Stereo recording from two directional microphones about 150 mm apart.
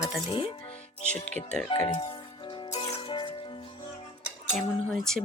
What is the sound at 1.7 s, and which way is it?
Music, 35° left (ahead or behind).